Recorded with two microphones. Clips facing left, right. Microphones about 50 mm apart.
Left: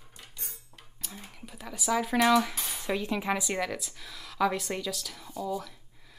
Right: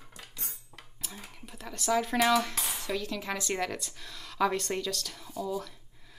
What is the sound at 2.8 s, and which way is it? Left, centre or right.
Cutlery, left.